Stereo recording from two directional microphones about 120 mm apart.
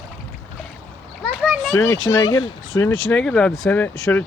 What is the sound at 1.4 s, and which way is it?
Children playing, centre (ahead or behind).